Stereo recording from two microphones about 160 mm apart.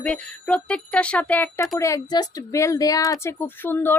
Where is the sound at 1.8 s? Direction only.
20° left (ahead or behind).